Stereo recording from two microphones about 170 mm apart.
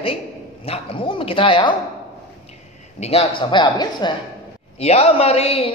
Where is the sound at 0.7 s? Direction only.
30° left (ahead or behind).